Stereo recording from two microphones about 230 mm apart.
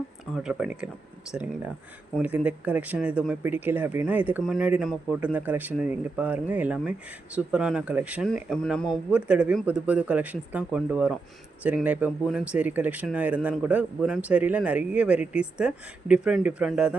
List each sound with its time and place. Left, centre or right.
0.3 s speech: centre
2.1 s speech: centre